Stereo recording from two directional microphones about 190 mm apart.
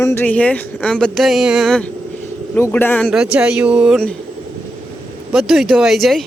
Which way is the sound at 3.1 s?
5° right (ahead or behind).